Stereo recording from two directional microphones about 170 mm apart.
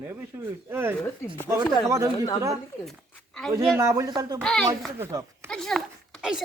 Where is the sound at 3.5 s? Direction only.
15° right (ahead or behind).